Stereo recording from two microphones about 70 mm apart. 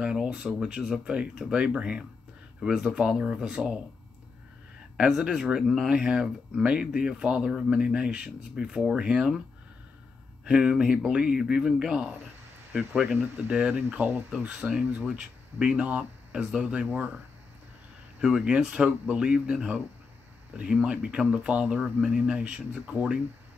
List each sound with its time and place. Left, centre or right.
0.0 s speech: centre
4.9 s speech: centre
10.4 s speech: centre
13.8 s speech: right
14.6 s speech: centre
15.0 s speech: centre
18.2 s speech: centre